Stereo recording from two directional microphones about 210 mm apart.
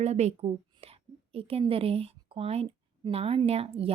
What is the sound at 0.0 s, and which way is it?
A woman's voice, 30° right (ahead or behind).